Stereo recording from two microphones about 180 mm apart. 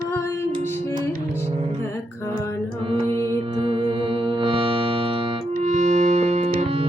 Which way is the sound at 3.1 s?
30° right (ahead or behind).